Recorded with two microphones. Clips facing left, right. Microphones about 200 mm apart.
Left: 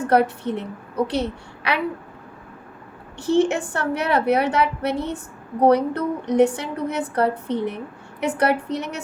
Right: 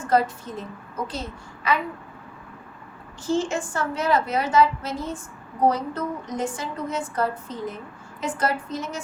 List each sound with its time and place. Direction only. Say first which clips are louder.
0.0 s a woman's voice: left 4 dB; 65° left (ahead or behind)
3.2 s a woman's voice: left 6 dB; 65° left (ahead or behind)